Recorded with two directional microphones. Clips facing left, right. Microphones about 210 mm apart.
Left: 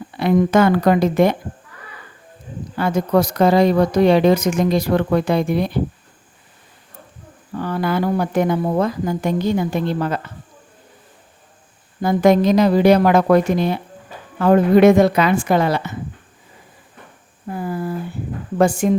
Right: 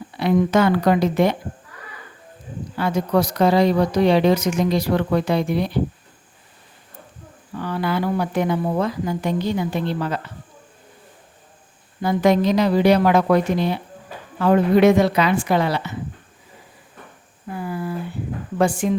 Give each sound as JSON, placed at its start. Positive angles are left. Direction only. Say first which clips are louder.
{"t": 0.2, "sound": "speech", "louder": "left 3 dB", "side_deg": 50}
{"t": 2.7, "sound": "speech", "louder": "left 3 dB", "side_deg": 50}
{"t": 7.5, "sound": "speech", "louder": "left 3 dB", "side_deg": 45}
{"t": 12.0, "sound": "speech", "louder": "left 3 dB", "side_deg": 50}
{"t": 17.6, "sound": "a sound", "louder": "left 3 dB", "side_deg": 45}
{"t": 18.5, "sound": "speech", "louder": "left 4 dB", "side_deg": 45}